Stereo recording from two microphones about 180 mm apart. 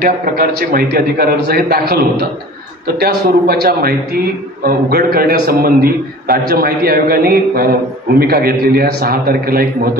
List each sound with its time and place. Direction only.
0.0 s a man's voice: 55° right (ahead or behind)
3.0 s a man's voice: 60° right (ahead or behind)